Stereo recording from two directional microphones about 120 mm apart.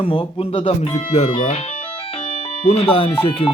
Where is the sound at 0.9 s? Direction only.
65° left (ahead or behind).